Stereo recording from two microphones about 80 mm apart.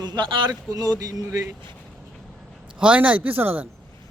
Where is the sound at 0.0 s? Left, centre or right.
Right.